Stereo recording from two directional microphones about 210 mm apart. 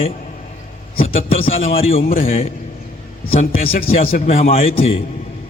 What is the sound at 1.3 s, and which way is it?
Speech, 30° left (ahead or behind).